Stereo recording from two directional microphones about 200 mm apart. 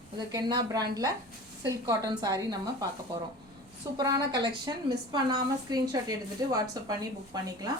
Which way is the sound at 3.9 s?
20° right (ahead or behind).